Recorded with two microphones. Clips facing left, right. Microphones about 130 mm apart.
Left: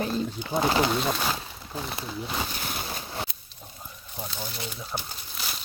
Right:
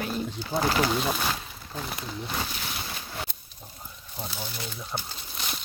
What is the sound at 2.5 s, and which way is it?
Boat, 45° left (ahead or behind).